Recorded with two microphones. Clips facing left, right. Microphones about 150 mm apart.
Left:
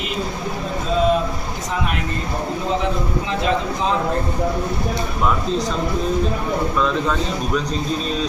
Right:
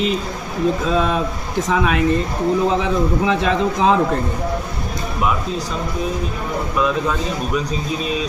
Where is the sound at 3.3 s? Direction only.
90° right.